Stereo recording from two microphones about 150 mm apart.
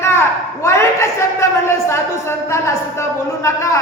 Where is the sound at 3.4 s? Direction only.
20° left (ahead or behind).